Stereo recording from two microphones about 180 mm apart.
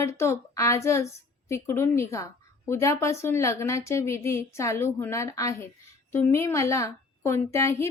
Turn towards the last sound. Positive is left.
turn(degrees=15)  # may be behind; listen again after turning